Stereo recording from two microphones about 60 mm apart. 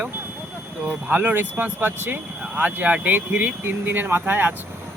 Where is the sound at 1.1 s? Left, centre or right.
Right.